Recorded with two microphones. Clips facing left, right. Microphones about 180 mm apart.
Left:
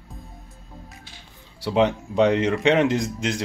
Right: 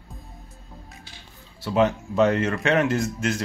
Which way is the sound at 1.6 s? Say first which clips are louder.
Left 1 dB; 15° left (ahead or behind).